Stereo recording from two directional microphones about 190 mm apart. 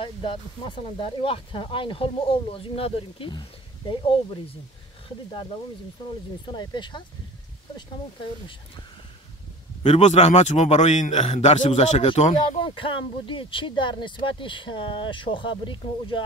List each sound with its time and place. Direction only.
0.0 s speech: 25° left (ahead or behind)
6.4 s speech: 25° left (ahead or behind)
9.8 s a man's voice: 35° left (ahead or behind)
12.4 s speech: 25° left (ahead or behind)